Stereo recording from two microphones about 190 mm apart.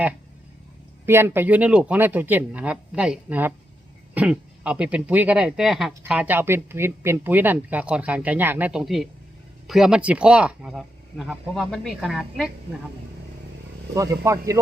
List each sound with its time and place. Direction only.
1.0 s speech: 10° right (ahead or behind)
13.9 s speech: 15° right (ahead or behind)